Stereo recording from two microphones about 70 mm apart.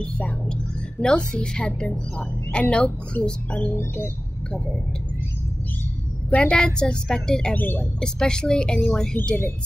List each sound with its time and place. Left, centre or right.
0.0 s a woman's voice: centre
6.3 s a woman's voice: centre
7.5 s speech: left
8.0 s a woman's voice: centre